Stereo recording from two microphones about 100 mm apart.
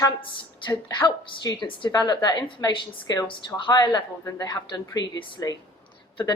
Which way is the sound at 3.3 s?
50° left (ahead or behind).